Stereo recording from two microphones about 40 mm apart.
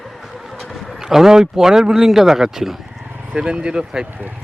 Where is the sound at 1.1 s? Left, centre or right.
Centre.